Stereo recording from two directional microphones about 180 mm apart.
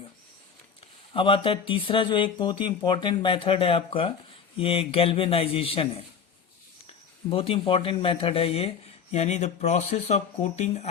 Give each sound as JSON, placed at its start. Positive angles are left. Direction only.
{"t": 1.1, "sound": "speech", "side_deg": 30}
{"t": 7.3, "sound": "speech", "side_deg": 30}